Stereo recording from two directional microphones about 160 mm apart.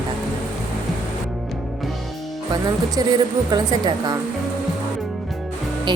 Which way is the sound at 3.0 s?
25° right (ahead or behind).